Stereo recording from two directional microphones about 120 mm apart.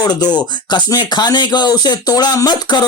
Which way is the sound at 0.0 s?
35° left (ahead or behind).